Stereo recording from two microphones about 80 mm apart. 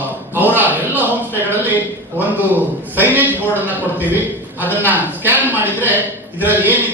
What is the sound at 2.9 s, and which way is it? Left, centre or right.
A man's voice, right.